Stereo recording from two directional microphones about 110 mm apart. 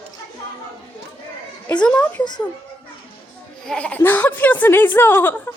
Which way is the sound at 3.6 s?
10° left (ahead or behind).